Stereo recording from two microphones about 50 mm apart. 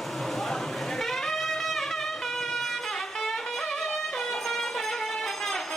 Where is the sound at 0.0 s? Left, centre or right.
Centre.